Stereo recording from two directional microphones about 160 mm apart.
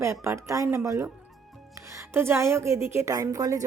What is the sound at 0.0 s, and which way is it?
A woman's voice, 20° right (ahead or behind).